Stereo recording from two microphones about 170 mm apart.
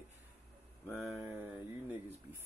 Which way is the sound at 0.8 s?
Centre (ahead or behind).